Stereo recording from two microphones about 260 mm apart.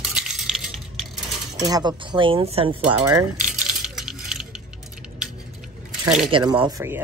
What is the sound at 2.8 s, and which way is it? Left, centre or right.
Speech, centre.